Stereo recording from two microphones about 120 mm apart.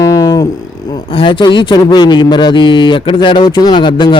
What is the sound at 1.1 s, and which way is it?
Speech, 45° left (ahead or behind).